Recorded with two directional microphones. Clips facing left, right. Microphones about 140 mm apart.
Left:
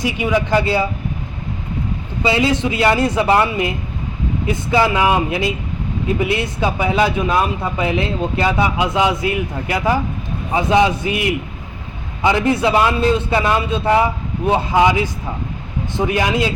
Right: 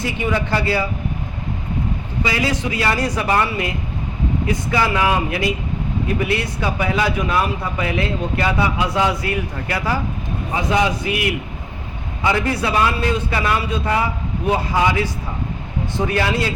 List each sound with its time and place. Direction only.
0.0 s a man's voice: 15° left (ahead or behind)
2.2 s a man's voice: 25° left (ahead or behind)